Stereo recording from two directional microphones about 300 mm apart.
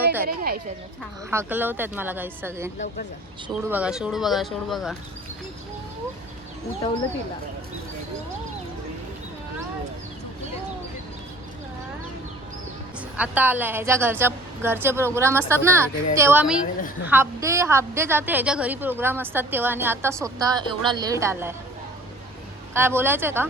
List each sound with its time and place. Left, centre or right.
0.3 s speech: right
1.3 s a woman's voice: centre
13.1 s a woman's voice: centre
22.7 s a woman's voice: centre